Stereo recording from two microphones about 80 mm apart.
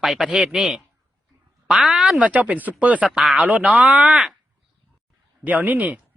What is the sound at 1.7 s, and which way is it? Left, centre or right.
Speech, centre.